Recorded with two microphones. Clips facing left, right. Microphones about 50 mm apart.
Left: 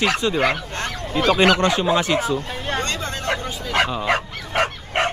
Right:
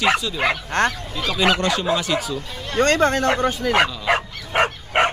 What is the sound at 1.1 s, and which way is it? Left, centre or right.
Speech, left.